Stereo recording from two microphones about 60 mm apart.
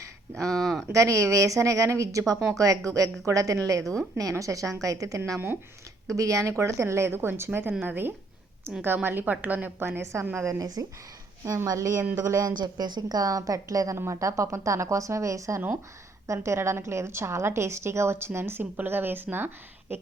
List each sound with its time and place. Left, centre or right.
0.4 s speech: centre
0.9 s a woman's voice: right
9.7 s a woman's voice: right
10.6 s speech: right
11.4 s a woman's voice: right
13.9 s a woman's voice: right